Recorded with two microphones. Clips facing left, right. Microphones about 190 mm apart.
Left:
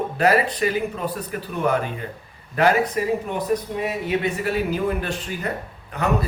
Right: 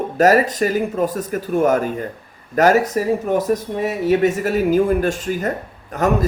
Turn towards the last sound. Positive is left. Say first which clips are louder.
# right 5 dB
turn(degrees=-45)  # may be behind; listen again after turning